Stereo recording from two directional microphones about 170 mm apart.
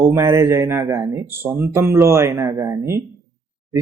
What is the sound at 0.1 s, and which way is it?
Speech, 15° right (ahead or behind).